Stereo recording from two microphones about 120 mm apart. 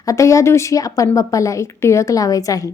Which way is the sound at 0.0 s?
25° left (ahead or behind).